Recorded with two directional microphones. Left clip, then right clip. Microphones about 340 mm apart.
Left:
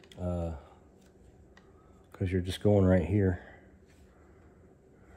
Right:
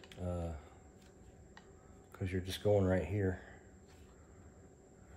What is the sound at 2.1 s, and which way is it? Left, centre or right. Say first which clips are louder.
Speech: left 7 dB; centre.